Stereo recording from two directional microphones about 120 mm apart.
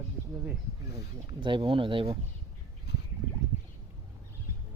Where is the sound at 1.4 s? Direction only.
40° right (ahead or behind).